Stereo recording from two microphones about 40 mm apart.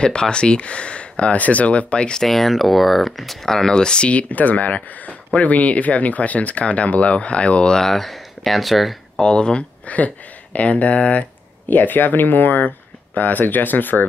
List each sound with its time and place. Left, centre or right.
0.0 s speech: left
2.2 s speech: centre; by 4.1 s left
4.1 s speech: left
7.7 s speech: centre
9.2 s speech: left
9.8 s speech: left
11.7 s speech: left